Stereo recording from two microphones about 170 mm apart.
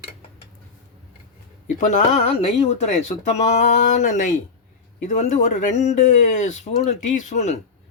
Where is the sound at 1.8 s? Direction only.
45° left (ahead or behind).